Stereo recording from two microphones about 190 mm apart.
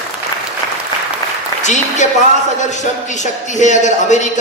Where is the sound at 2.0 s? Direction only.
40° left (ahead or behind).